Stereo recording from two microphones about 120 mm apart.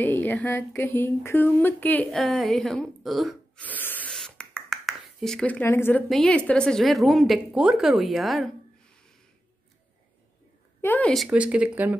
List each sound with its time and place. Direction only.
0.0 s speech: 15° left (ahead or behind)
2.0 s speech: centre (ahead or behind)
3.6 s spray: 15° left (ahead or behind)
4.1 s a sound: 5° left (ahead or behind)
6.0 s speech: 5° left (ahead or behind)
10.8 s speech: 15° left (ahead or behind)
11.2 s speech: 10° right (ahead or behind)